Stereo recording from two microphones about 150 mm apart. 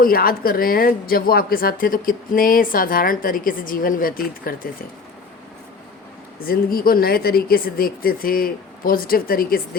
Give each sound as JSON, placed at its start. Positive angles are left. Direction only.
{"t": 0.0, "sound": "speech", "side_deg": 75}
{"t": 6.4, "sound": "speech", "side_deg": 80}